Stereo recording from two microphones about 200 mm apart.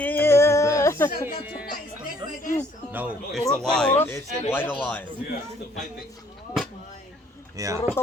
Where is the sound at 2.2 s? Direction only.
25° right (ahead or behind).